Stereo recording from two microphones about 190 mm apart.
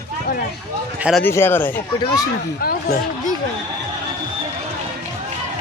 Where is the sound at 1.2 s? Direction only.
10° left (ahead or behind).